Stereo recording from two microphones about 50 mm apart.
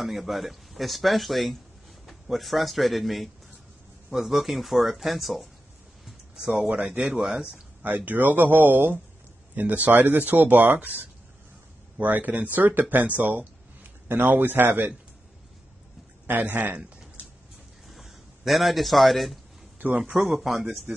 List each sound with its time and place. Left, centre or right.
0.0 s speech: centre
6.3 s speech: centre
7.8 s a man's voice: right
16.3 s speech: right
17.8 s a sound: centre
19.8 s speech: right
20.2 s speech: centre